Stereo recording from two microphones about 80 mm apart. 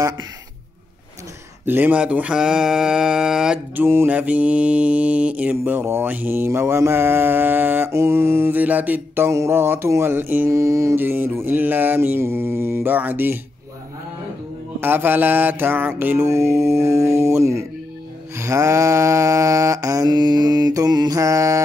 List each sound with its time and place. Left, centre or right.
1.7 s mantra: right; by 3.6 s centre
3.7 s mantra: right
4.1 s mantra: centre
5.9 s mantra: right
9.3 s mantra: right
10.5 s mantra: right
11.0 s mantra: right
14.8 s mantra: right
16.3 s mantra: right
20.1 s mantra: right
21.2 s mantra: right